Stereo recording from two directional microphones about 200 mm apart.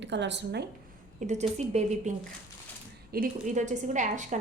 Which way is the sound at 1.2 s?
35° right (ahead or behind).